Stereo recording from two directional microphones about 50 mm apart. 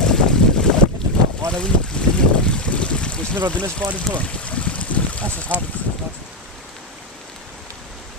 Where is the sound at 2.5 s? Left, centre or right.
Left.